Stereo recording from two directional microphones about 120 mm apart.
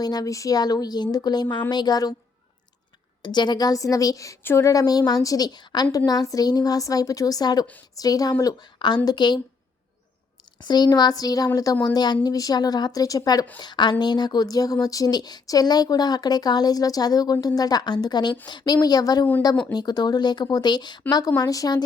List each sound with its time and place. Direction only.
0.0 s speech: 35° left (ahead or behind)
3.2 s speech: 35° left (ahead or behind)
10.6 s speech: 35° left (ahead or behind)